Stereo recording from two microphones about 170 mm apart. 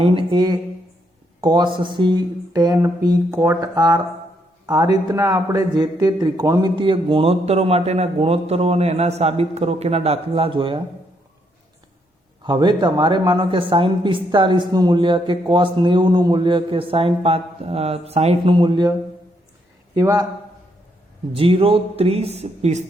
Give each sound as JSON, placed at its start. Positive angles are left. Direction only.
{"t": 0.0, "sound": "a woman's voice", "side_deg": -30}
{"t": 12.4, "sound": "a woman's voice", "side_deg": -25}
{"t": 21.3, "sound": "a man's voice", "side_deg": -35}